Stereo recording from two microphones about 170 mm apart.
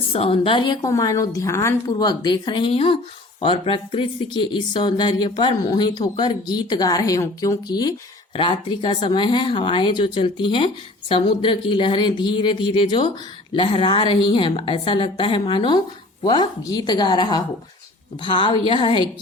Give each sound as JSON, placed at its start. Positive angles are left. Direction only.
{"t": 0.1, "sound": "a woman's voice", "side_deg": 35}